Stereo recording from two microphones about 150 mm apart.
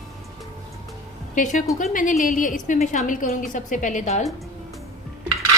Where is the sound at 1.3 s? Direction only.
60° left (ahead or behind).